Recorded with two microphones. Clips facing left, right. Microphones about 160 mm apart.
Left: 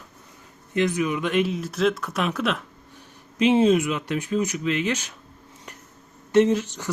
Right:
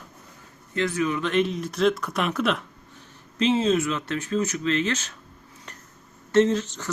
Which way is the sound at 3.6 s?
10° left (ahead or behind).